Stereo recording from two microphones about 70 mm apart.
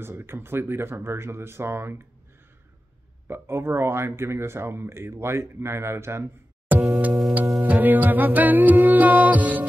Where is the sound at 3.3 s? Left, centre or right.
Right.